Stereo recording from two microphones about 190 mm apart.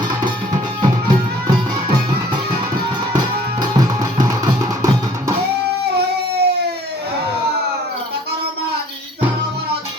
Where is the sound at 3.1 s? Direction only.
20° right (ahead or behind).